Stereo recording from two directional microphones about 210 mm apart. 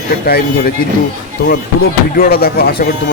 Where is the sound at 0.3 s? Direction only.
45° left (ahead or behind).